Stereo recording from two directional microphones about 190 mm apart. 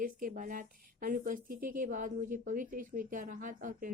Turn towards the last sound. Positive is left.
turn(degrees=-45)  # may be behind; listen again after turning